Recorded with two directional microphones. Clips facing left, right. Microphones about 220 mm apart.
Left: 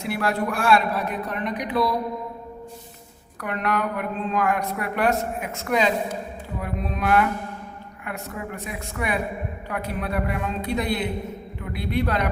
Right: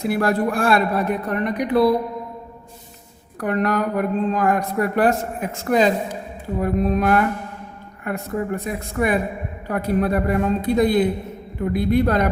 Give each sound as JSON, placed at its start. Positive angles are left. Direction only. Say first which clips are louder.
{"t": 0.0, "sound": "a woman's voice", "louder": "right 5 dB", "side_deg": -45}
{"t": 0.7, "sound": "a man's voice", "louder": "right 3 dB", "side_deg": -50}
{"t": 3.4, "sound": "a woman's voice", "louder": "right 5 dB", "side_deg": -40}